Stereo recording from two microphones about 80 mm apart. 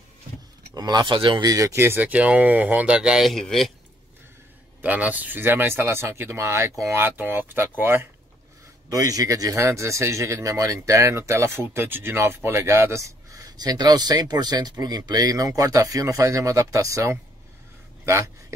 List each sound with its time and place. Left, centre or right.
0.7 s speech: right
1.4 s speech: right
1.8 s speech: right; by 3.3 s centre
3.3 s speech: centre
4.8 s speech: centre
8.9 s speech: right